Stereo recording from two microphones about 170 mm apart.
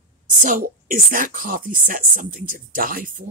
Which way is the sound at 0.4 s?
50° right (ahead or behind).